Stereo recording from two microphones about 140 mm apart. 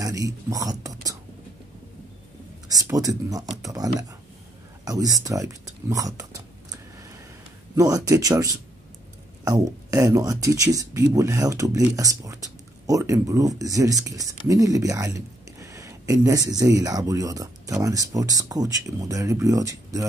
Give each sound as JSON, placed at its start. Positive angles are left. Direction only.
{"t": 0.0, "sound": "speech", "side_deg": -25}
{"t": 2.7, "sound": "speech", "side_deg": -25}